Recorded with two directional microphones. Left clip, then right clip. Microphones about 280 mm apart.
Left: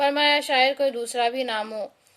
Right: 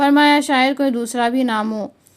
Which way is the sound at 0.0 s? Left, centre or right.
Centre.